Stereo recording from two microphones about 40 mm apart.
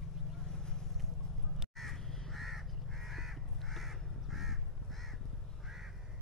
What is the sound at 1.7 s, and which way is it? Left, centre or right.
Crow, centre.